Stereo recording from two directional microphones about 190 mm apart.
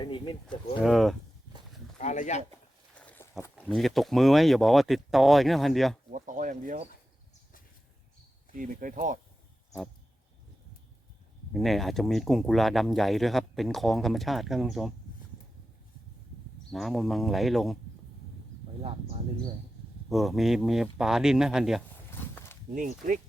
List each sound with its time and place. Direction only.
0.0 s speech: 25° left (ahead or behind)
0.8 s speech: centre (ahead or behind)
2.0 s speech: 40° left (ahead or behind)
2.9 s a sound: 5° left (ahead or behind)
3.8 s speech: centre (ahead or behind)
6.1 s speech: 45° right (ahead or behind)
8.5 s speech: 45° right (ahead or behind)
11.5 s speech: centre (ahead or behind)
16.7 s speech: centre (ahead or behind)
20.1 s speech: centre (ahead or behind)
22.1 s a sound: 10° left (ahead or behind)
22.7 s speech: 45° right (ahead or behind)